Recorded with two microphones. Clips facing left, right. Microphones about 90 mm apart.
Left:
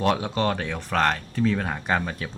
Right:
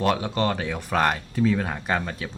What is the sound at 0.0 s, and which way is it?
Speech, centre (ahead or behind).